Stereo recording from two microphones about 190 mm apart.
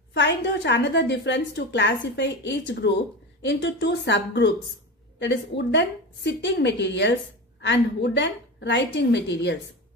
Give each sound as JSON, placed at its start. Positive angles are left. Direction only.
{"t": 0.1, "sound": "a woman's voice", "side_deg": 65}